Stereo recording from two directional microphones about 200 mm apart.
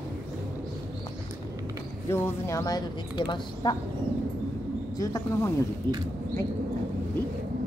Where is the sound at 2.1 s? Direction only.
15° left (ahead or behind).